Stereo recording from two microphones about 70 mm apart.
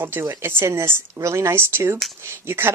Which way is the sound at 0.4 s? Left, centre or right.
Right.